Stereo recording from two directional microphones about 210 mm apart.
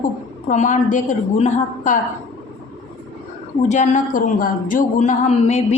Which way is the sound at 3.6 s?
35° left (ahead or behind).